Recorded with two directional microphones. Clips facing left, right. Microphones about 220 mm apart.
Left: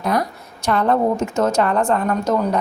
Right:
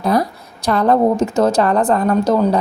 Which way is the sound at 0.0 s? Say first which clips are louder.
Right 4 dB; 30° right (ahead or behind).